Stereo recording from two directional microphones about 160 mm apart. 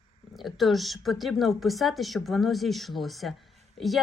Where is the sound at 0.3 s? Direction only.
Centre (ahead or behind).